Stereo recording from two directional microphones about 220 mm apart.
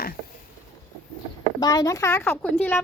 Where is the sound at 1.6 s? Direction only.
15° left (ahead or behind).